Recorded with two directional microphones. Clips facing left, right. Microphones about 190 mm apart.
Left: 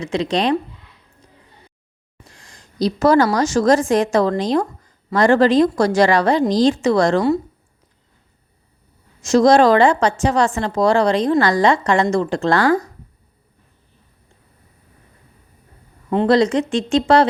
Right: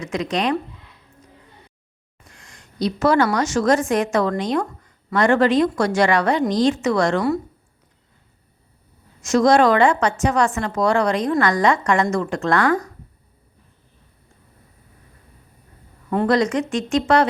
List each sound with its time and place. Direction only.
0.0 s a woman's voice: 30° left (ahead or behind)
2.2 s a woman's voice: 30° left (ahead or behind)
9.2 s a woman's voice: 30° left (ahead or behind)
16.0 s a woman's voice: 25° left (ahead or behind)